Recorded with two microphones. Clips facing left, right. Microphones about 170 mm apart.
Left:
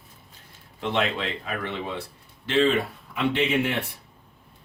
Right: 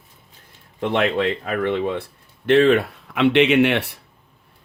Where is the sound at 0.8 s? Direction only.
55° right (ahead or behind); by 3.9 s 75° right (ahead or behind).